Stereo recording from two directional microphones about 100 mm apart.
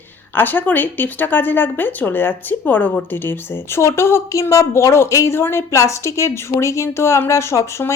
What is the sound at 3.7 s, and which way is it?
A woman's voice, 25° left (ahead or behind).